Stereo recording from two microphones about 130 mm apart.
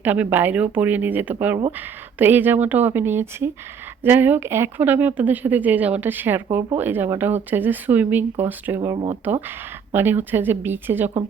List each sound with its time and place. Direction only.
0.0 s a woman's voice: 15° right (ahead or behind)
8.8 s speech: 30° right (ahead or behind)
9.9 s a woman's voice: 15° right (ahead or behind)